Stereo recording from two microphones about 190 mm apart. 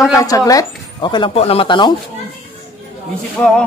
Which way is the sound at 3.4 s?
5° left (ahead or behind).